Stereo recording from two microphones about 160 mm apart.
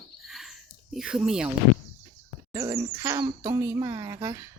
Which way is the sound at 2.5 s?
20° right (ahead or behind).